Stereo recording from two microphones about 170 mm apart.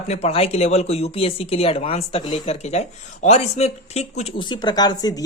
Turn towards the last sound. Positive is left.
turn(degrees=20)  # may be behind; listen again after turning